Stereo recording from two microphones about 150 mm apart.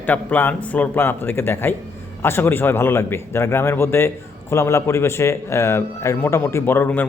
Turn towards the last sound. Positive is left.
turn(degrees=15)  # may be behind; listen again after turning